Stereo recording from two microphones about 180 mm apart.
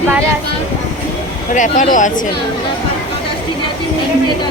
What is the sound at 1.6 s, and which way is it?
Speech, 45° left (ahead or behind).